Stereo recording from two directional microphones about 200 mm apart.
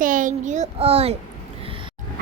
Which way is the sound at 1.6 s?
25° right (ahead or behind).